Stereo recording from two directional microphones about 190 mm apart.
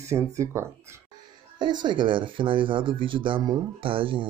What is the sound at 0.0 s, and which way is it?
Speech, 15° right (ahead or behind).